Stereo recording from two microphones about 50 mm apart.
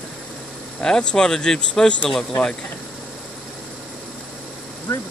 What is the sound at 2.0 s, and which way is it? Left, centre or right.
Speech, centre.